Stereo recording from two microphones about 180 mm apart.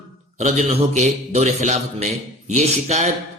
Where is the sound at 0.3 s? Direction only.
35° right (ahead or behind).